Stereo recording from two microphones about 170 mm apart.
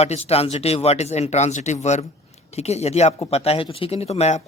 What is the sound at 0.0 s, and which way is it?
Speech, 40° left (ahead or behind).